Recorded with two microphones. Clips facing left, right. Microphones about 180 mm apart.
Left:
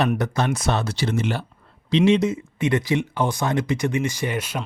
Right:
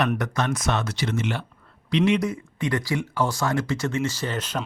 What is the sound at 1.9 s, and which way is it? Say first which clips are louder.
Speech: left 4 dB; 25° left (ahead or behind).